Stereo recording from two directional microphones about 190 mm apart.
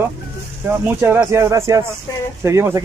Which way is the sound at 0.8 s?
10° right (ahead or behind).